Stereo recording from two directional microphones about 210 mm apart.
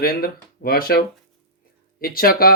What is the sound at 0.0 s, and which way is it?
Speech, 45° left (ahead or behind).